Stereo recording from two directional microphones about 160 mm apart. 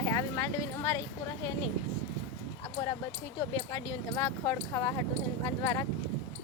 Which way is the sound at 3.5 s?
20° left (ahead or behind).